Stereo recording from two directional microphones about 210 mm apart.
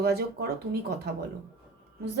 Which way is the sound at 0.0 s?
50° right (ahead or behind).